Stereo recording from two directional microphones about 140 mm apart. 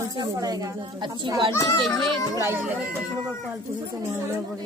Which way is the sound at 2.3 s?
20° right (ahead or behind).